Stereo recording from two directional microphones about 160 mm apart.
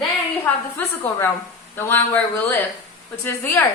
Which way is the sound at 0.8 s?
15° left (ahead or behind).